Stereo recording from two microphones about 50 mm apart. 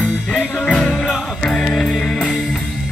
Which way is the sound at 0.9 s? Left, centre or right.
Centre.